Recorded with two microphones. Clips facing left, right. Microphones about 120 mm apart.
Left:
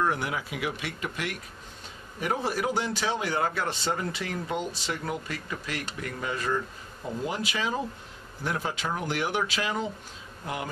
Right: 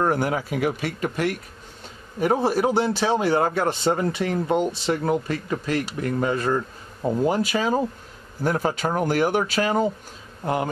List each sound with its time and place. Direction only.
0.0 s speech: 45° right (ahead or behind)
3.9 s speech: 35° right (ahead or behind)